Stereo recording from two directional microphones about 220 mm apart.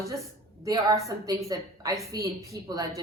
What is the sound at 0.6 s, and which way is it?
A woman's voice, 15° right (ahead or behind).